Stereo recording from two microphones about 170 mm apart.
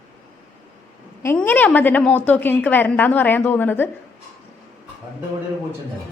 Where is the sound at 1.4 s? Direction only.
10° left (ahead or behind).